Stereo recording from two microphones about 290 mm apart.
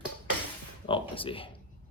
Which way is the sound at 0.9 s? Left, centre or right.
Centre.